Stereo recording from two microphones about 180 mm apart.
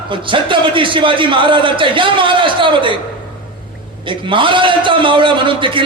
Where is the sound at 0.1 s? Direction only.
25° right (ahead or behind).